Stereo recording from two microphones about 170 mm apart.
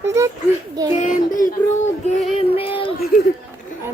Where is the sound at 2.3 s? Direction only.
30° left (ahead or behind).